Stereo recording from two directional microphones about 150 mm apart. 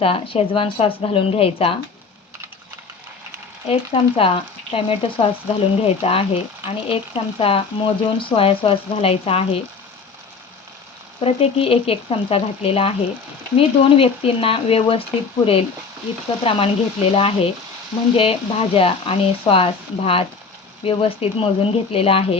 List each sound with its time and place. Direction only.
0.0 s speech: 40° left (ahead or behind)
3.7 s speech: 40° left (ahead or behind)
11.2 s speech: 40° left (ahead or behind)
16.4 s speech: 40° left (ahead or behind)